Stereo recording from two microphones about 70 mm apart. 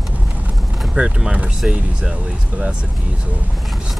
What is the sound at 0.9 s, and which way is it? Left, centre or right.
Speech, centre.